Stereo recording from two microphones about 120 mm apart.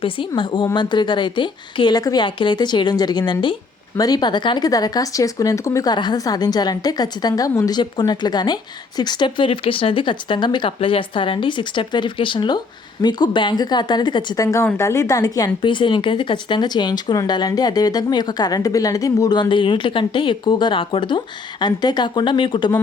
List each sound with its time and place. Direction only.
0.0 s speech: 45° left (ahead or behind)
14.4 s a woman's voice: 25° left (ahead or behind)
15.6 s speech: 45° left (ahead or behind)